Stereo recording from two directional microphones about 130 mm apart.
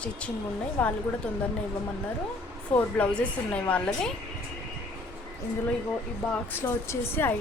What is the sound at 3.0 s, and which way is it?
A woman's voice, 10° left (ahead or behind).